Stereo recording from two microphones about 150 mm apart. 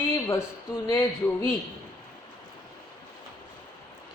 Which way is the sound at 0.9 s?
25° left (ahead or behind).